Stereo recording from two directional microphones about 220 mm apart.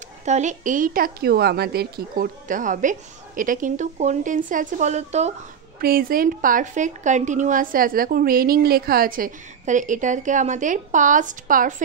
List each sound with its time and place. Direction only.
0.2 s a woman's voice: 30° right (ahead or behind)
5.8 s a woman's voice: 45° right (ahead or behind)